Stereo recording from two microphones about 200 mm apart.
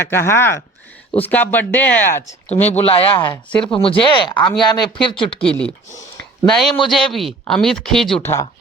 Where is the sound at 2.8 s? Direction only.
30° left (ahead or behind).